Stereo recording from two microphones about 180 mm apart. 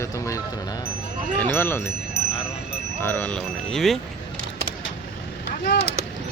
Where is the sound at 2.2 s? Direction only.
60° left (ahead or behind).